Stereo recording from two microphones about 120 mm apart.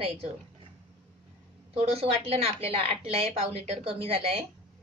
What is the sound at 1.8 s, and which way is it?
A woman's voice, 55° right (ahead or behind).